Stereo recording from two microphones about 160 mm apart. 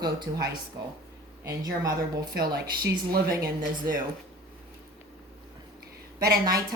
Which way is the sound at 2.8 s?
75° right (ahead or behind).